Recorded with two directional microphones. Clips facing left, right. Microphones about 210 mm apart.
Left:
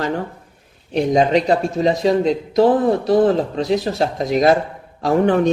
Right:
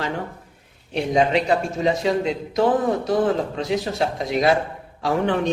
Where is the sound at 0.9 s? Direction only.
40° left (ahead or behind).